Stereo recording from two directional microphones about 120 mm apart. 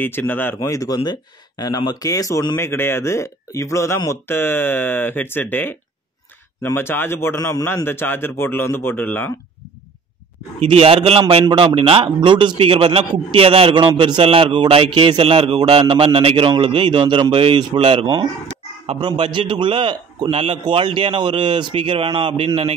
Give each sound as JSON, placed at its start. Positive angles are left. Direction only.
{"t": 0.0, "sound": "speech", "side_deg": 15}
{"t": 0.6, "sound": "speech", "side_deg": 25}
{"t": 10.6, "sound": "a man's voice", "side_deg": -55}
{"t": 15.8, "sound": "a man's voice", "side_deg": -45}
{"t": 20.2, "sound": "a man's voice", "side_deg": -55}